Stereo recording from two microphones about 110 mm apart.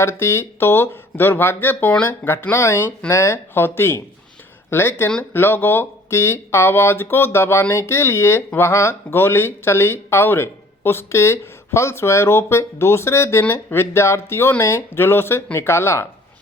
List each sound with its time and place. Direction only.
0.0 s speech: 20° left (ahead or behind)